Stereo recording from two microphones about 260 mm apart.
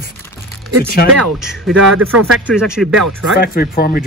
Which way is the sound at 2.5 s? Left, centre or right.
Centre.